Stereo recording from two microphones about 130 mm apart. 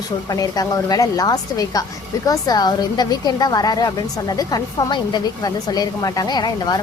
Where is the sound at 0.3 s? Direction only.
30° left (ahead or behind).